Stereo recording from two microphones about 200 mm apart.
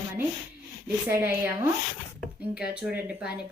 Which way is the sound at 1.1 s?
10° right (ahead or behind).